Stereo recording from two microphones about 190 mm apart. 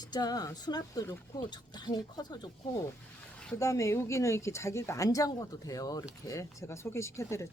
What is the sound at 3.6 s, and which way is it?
Speech, 15° left (ahead or behind).